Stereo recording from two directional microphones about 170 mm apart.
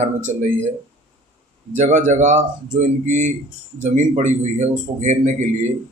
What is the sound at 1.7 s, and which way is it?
Speech, 45° right (ahead or behind).